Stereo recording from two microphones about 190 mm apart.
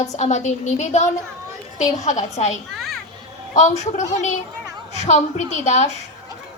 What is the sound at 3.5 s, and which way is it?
A woman's voice, 35° left (ahead or behind).